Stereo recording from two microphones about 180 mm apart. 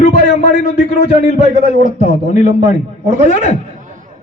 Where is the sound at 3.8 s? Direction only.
45° right (ahead or behind).